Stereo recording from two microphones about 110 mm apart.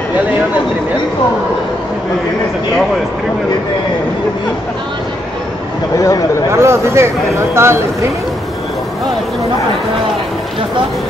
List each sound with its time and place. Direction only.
5.9 s speech: 30° left (ahead or behind)
6.5 s speech: 25° right (ahead or behind)